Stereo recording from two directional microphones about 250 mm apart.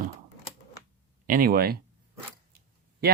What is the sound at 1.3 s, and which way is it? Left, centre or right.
Speech, right.